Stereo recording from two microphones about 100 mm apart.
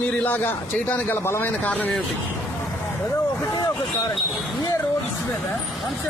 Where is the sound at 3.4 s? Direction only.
40° left (ahead or behind).